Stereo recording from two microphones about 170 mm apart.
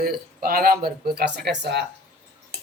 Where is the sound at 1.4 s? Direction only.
85° right.